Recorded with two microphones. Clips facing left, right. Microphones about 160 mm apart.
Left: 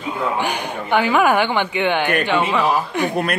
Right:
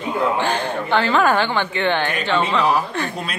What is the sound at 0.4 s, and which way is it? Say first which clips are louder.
A woman's voice: right 2 dB; 15° left (ahead or behind).